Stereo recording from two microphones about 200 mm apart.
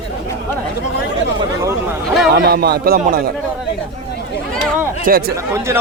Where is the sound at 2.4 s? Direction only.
55° right (ahead or behind).